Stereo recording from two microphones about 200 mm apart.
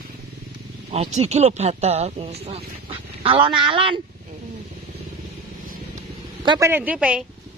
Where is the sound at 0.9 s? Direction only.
30° right (ahead or behind).